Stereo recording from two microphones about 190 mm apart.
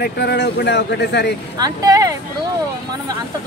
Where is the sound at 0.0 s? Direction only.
60° left (ahead or behind).